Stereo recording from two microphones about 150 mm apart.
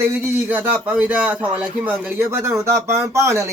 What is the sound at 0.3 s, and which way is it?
A man's voice, 10° right (ahead or behind).